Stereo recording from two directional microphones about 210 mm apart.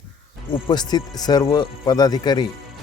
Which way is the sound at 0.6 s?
20° left (ahead or behind).